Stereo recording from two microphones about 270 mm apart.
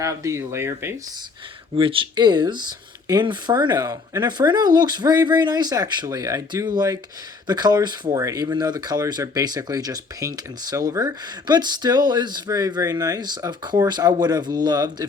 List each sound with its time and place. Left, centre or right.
0.0 s speech: centre
1.7 s speech: centre